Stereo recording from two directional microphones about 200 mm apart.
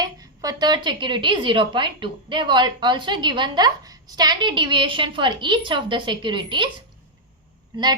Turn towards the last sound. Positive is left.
turn(degrees=-25)  # may be behind; listen again after turning